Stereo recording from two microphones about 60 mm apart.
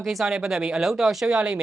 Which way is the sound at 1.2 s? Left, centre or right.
Centre.